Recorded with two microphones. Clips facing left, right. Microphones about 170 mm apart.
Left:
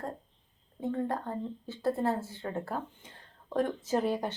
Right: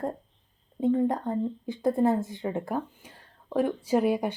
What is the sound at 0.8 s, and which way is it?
A woman's voice, 20° right (ahead or behind).